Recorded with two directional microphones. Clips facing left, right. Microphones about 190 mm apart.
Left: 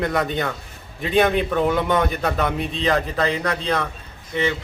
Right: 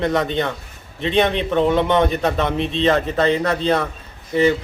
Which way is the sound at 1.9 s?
25° right (ahead or behind).